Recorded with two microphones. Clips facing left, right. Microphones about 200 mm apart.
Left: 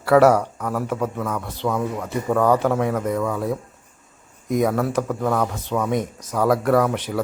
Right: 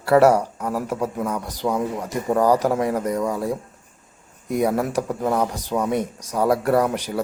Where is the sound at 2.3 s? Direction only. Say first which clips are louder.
Even; 35° right (ahead or behind).